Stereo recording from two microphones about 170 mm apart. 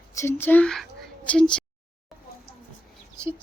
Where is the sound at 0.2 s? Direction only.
15° left (ahead or behind).